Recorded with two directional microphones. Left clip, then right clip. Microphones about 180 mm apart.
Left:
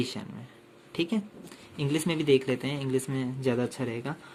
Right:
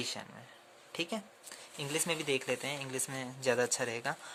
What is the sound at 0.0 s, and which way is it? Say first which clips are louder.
Speech: left 5 dB; 30° right (ahead or behind).